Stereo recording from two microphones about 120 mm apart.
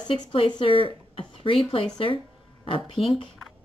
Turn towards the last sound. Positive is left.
turn(degrees=50)  # may be behind; listen again after turning